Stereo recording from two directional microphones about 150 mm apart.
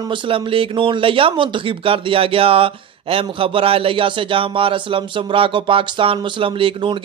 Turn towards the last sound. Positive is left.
turn(degrees=-35)  # may be behind; listen again after turning